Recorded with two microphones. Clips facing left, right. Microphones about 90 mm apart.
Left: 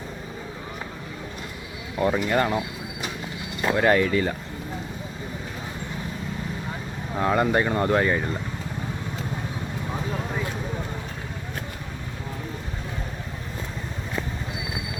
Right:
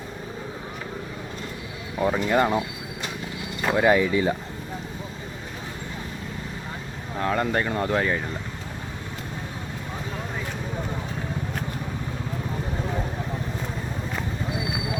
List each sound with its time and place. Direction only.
2.0 s speech: centre (ahead or behind)
2.3 s speech: 15° right (ahead or behind)
3.8 s speech: 10° right (ahead or behind)
7.2 s speech: 5° left (ahead or behind)